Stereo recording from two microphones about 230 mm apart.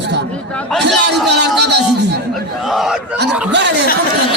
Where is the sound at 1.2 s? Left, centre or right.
Right.